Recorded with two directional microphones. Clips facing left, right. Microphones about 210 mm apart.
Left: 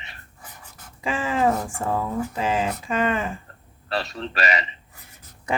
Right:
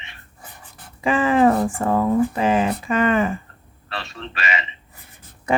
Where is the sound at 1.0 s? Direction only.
60° right (ahead or behind).